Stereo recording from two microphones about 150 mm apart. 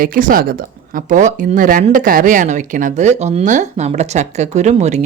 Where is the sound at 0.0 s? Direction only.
65° right (ahead or behind).